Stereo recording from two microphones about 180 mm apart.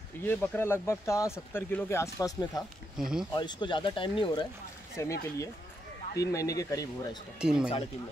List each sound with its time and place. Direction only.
0.2 s speech: 10° left (ahead or behind)
3.0 s speech: 5° right (ahead or behind)
3.3 s speech: 25° left (ahead or behind)
5.0 s speech: 15° left (ahead or behind)
6.1 s speech: 20° left (ahead or behind)
7.3 s speech: 5° right (ahead or behind)